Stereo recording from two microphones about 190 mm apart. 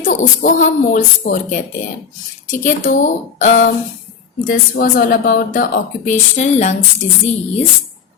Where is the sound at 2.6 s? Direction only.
40° left (ahead or behind).